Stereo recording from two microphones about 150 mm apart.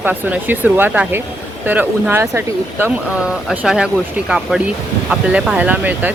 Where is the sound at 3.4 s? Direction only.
5° right (ahead or behind).